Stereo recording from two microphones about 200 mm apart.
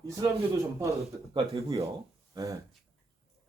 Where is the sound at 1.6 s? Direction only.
15° right (ahead or behind).